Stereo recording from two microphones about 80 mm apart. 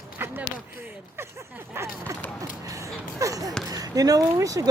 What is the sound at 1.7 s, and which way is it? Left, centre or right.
Speech, right.